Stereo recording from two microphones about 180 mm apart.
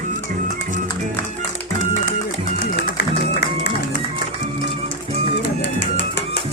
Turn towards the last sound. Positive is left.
turn(degrees=70)  # may be behind; listen again after turning